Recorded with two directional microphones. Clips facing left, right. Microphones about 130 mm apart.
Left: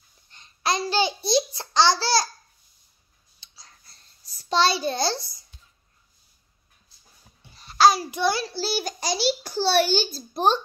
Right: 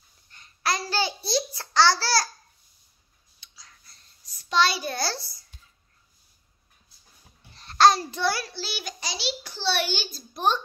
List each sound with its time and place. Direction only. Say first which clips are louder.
0.3 s babbling: left 2 dB; 20° left (ahead or behind)
3.3 s clicking: left 1 dB; 30° left (ahead or behind)
7.5 s a child's voice: even; 5° left (ahead or behind); by 8.5 s 20° left (ahead or behind)
8.5 s a child's voice: left 8 dB; 35° left (ahead or behind)